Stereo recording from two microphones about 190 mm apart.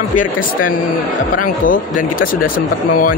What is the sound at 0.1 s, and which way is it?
Speech, 45° left (ahead or behind).